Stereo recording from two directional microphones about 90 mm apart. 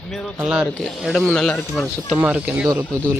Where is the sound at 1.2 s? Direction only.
10° left (ahead or behind).